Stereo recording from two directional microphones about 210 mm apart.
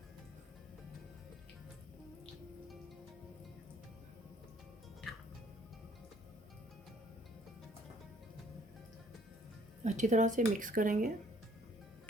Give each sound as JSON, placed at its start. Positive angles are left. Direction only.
{"t": 9.8, "sound": "speech", "side_deg": -35}